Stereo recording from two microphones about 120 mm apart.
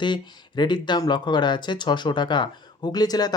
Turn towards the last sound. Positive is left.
turn(degrees=35)  # may be behind; listen again after turning